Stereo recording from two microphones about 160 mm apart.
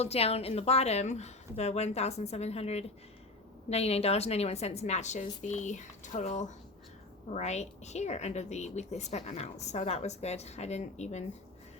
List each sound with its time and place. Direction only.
0.0 s a woman's voice: 40° left (ahead or behind)